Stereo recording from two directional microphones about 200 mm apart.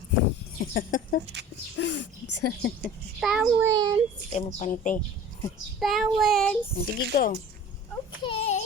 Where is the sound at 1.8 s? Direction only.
60° left (ahead or behind).